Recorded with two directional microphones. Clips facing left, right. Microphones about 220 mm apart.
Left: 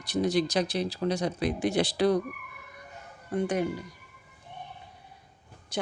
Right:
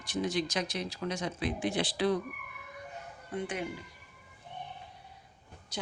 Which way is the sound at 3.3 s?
40° left (ahead or behind).